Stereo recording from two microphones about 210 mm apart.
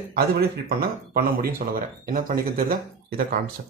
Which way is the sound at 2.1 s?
40° right (ahead or behind).